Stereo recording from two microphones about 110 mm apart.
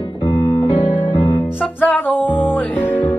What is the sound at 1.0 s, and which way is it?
Music, 15° left (ahead or behind).